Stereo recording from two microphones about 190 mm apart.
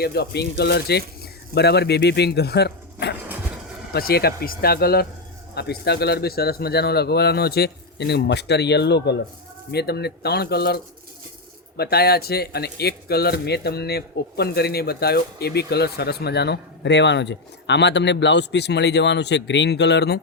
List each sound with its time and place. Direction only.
0.0 s a man's voice: 60° left (ahead or behind)
11.8 s a man's voice: 55° left (ahead or behind)